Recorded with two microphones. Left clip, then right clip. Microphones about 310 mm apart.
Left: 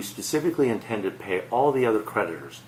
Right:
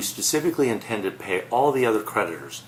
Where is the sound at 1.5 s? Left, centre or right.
Left.